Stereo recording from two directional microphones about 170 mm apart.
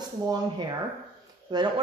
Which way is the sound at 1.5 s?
25° right (ahead or behind).